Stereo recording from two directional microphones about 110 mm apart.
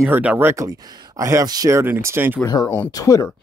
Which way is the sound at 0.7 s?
35° right (ahead or behind).